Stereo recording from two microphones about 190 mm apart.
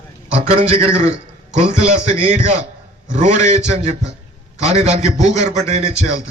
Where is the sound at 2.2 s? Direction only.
35° right (ahead or behind).